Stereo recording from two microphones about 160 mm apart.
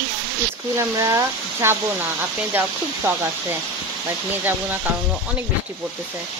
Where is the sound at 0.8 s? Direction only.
20° right (ahead or behind).